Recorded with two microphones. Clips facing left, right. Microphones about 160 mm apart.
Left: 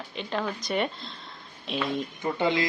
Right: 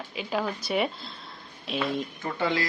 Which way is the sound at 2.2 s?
20° left (ahead or behind).